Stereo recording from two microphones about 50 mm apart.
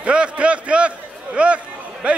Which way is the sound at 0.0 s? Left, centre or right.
Right.